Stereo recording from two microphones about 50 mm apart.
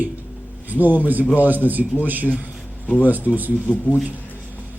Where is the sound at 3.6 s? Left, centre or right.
Left.